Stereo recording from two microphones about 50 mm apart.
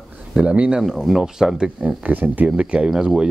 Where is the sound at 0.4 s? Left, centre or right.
Right.